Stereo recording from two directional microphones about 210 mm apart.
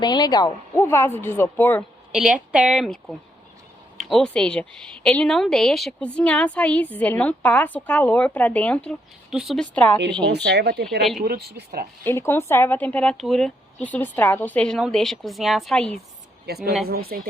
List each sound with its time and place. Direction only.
0.0 s a woman's voice: 20° left (ahead or behind)
2.1 s a woman's voice: 5° right (ahead or behind)
10.3 s speech: 55° right (ahead or behind)
12.0 s speech: 10° left (ahead or behind)
16.5 s speech: 50° right (ahead or behind)